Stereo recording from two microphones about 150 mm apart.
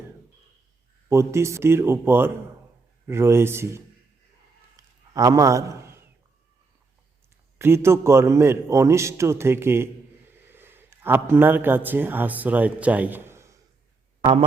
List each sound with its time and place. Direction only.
1.1 s a man's voice: 20° right (ahead or behind)
4.8 s a sound: 25° right (ahead or behind)
7.6 s a man's voice: 15° right (ahead or behind)